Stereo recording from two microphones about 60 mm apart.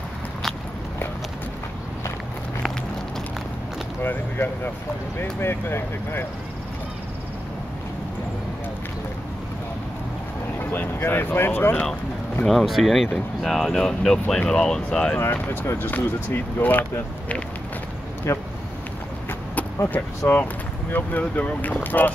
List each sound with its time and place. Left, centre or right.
4.0 s speech: left
10.6 s speech: left
12.4 s speech: centre
15.3 s speech: left
18.3 s speech: left
19.9 s speech: left
20.9 s speech: left